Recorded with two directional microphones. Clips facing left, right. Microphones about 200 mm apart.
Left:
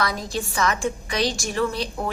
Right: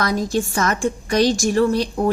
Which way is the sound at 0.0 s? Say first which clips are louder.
Right 6 dB; 45° right (ahead or behind).